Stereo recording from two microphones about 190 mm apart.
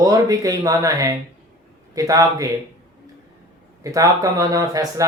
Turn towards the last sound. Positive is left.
turn(degrees=-20)  # may be behind; listen again after turning